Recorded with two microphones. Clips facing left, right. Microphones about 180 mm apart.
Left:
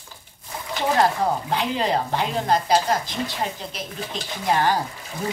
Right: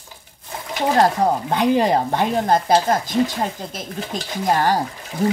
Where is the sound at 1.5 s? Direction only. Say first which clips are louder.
Right 6 dB; 45° right (ahead or behind).